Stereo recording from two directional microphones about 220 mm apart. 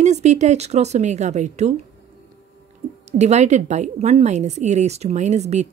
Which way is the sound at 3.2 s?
30° right (ahead or behind).